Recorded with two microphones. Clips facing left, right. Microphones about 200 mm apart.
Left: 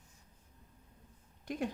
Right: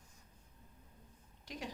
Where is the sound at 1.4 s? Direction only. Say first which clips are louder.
Left 9 dB; 55° left (ahead or behind).